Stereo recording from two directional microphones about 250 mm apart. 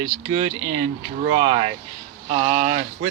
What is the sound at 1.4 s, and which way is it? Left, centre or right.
Speech, right.